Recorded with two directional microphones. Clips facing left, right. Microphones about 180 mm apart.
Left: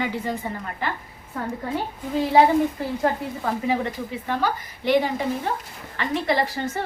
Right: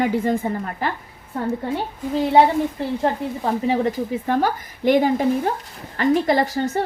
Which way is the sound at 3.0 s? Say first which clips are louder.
Right 2 dB; 25° right (ahead or behind).